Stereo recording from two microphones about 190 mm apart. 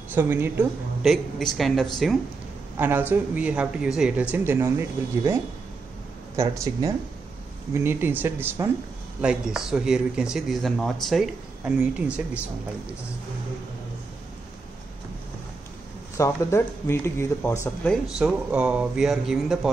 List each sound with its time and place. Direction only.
0.1 s speech: 10° right (ahead or behind)
1.0 s speech: centre (ahead or behind)
2.8 s speech: 10° right (ahead or behind)
6.3 s speech: 15° right (ahead or behind)
16.2 s speech: 15° left (ahead or behind)
18.2 s speech: 5° right (ahead or behind)